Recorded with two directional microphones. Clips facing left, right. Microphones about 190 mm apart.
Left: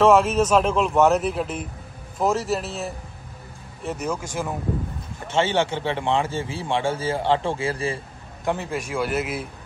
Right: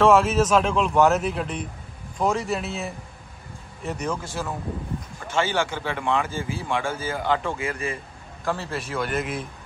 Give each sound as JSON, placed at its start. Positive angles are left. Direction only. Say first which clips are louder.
{"t": 0.0, "sound": "speech", "louder": "left 1 dB", "side_deg": 0}
{"t": 4.2, "sound": "a man's voice", "louder": "left 2 dB", "side_deg": 15}
{"t": 8.5, "sound": "a man's voice", "louder": "left 2 dB", "side_deg": 15}